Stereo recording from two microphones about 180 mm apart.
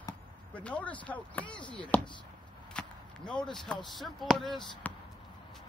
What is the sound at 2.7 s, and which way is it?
Whip, 5° left (ahead or behind).